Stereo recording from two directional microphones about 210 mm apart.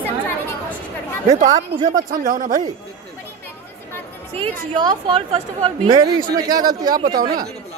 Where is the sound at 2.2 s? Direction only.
40° right (ahead or behind).